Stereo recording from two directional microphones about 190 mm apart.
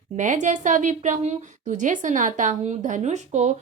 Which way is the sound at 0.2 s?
40° right (ahead or behind).